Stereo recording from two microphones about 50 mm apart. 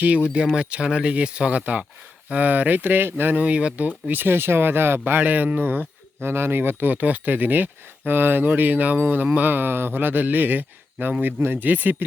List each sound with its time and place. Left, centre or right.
0.5 s speech: right
3.3 s speech: right
5.2 s speech: right
6.2 s speech: right